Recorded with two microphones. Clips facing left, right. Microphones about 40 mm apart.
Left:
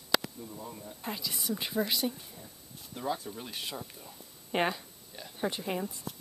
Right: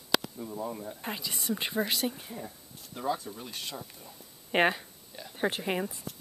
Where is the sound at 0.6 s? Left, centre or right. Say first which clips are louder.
Right 10 dB; right.